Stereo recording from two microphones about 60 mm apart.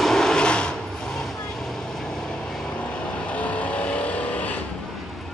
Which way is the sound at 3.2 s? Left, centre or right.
Left.